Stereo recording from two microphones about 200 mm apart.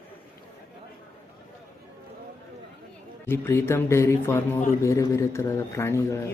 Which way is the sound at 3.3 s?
10° left (ahead or behind).